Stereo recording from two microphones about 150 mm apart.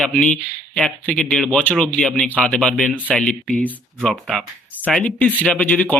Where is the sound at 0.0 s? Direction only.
5° left (ahead or behind).